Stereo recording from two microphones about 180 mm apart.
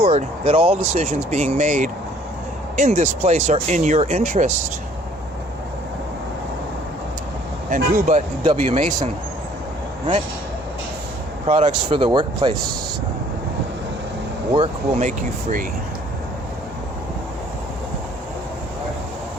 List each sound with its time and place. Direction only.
0.0 s speech: 35° right (ahead or behind)
7.7 s speech: 45° right (ahead or behind)
11.4 s speech: 35° right (ahead or behind)
14.5 s speech: 35° right (ahead or behind)